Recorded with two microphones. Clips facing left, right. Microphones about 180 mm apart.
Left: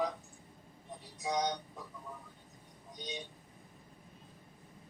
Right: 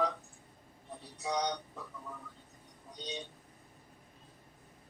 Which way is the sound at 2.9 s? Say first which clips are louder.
Right 1 dB; 15° left (ahead or behind).